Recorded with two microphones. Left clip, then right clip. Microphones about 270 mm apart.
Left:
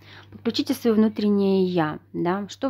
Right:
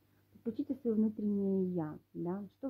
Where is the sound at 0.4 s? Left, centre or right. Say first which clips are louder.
Left 14 dB; left.